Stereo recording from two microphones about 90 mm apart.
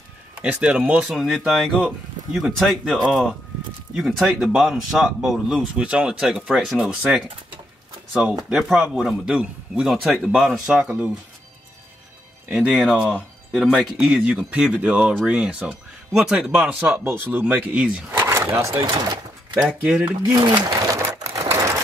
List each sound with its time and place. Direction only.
0.4 s speech: 15° right (ahead or behind)
1.1 s speech: centre (ahead or behind)
10.0 s speech: centre (ahead or behind)
12.5 s speech: 5° right (ahead or behind)
18.1 s speech: 30° right (ahead or behind)
19.5 s speech: 15° right (ahead or behind)
20.3 s sewing machine: 55° right (ahead or behind); by 21.8 s 30° right (ahead or behind)